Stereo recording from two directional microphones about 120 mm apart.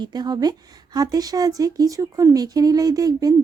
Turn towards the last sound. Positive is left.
turn(degrees=-30)  # may be behind; listen again after turning